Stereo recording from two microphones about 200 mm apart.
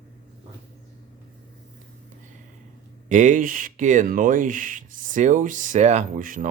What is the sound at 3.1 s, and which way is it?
Speech, 40° right (ahead or behind).